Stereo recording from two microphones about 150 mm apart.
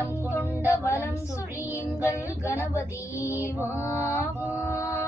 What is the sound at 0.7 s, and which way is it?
Child singing, 20° left (ahead or behind).